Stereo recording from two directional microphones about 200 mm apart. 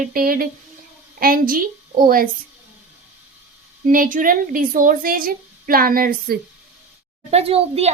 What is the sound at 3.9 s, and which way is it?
A woman's voice, 40° right (ahead or behind).